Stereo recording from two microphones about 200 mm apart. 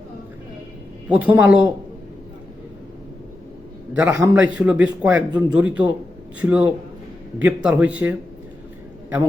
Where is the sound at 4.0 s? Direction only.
15° right (ahead or behind).